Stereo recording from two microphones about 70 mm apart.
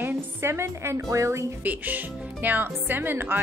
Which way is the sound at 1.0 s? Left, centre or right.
Right.